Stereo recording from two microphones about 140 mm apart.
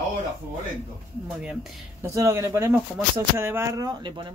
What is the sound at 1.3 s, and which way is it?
Speech, 5° right (ahead or behind).